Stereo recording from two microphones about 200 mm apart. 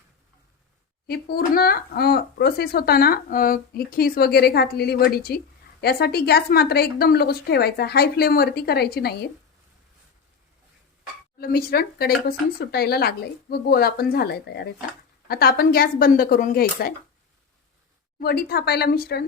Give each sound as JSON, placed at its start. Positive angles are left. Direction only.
{"t": 1.0, "sound": "speech", "side_deg": 50}
{"t": 11.3, "sound": "speech", "side_deg": 50}
{"t": 18.2, "sound": "speech", "side_deg": 50}